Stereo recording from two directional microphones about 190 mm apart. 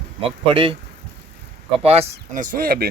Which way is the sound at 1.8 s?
35° right (ahead or behind).